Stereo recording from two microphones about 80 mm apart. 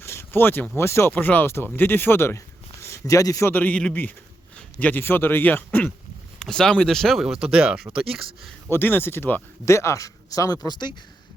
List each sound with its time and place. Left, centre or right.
0.0 s a sound: left
0.8 s speech: left
1.1 s speech: left
3.5 s speech: centre
6.4 s speech: centre
8.7 s speech: left
9.6 s speech: left